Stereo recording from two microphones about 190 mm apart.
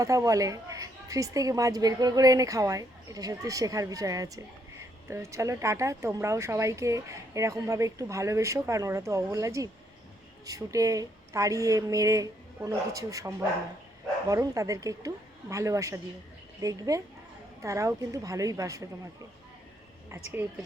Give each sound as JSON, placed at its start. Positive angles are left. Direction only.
{"t": 0.0, "sound": "speech", "side_deg": -15}